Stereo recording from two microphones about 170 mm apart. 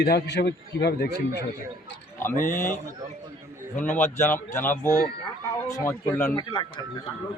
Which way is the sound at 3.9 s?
45° left (ahead or behind).